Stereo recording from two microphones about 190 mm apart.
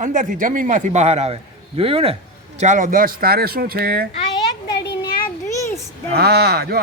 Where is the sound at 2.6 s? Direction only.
40° right (ahead or behind).